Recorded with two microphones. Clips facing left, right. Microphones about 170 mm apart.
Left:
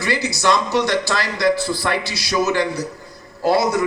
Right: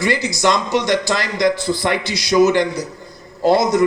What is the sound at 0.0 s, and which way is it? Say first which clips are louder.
A man's voice: right 3 dB; 15° right (ahead or behind).